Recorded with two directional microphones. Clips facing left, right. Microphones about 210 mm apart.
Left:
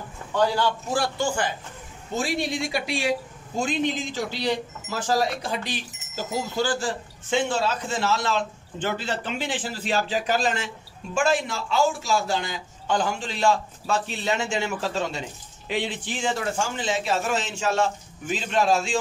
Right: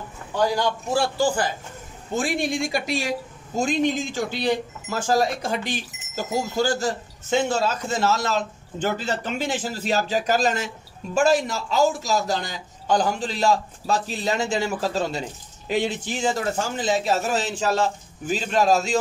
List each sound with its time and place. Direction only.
0.9 s a man's voice: 30° right (ahead or behind)
2.1 s a woman's voice: 50° right (ahead or behind)